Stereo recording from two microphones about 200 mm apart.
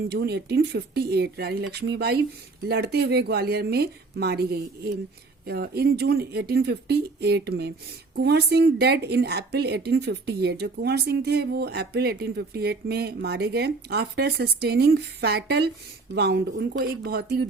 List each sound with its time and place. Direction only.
0.1 s a woman's voice: 55° right (ahead or behind)